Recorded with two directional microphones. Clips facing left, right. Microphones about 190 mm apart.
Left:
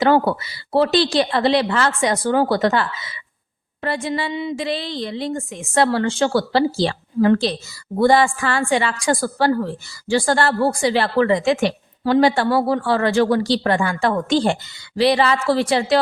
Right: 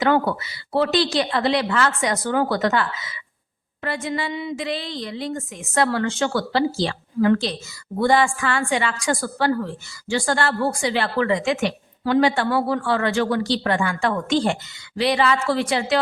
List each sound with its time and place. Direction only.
0.0 s a woman's voice: 30° left (ahead or behind)